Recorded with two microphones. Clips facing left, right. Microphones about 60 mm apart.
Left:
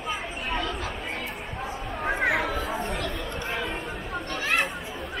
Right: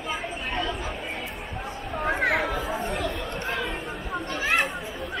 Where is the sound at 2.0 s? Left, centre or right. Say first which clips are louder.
Right 1 dB; centre.